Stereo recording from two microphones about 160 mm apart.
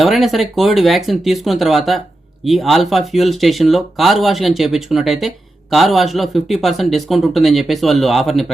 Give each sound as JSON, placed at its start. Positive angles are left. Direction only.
{"t": 0.0, "sound": "speech", "side_deg": 0}